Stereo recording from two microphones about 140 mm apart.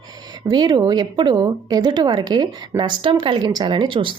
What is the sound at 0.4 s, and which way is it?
Speech, 30° right (ahead or behind).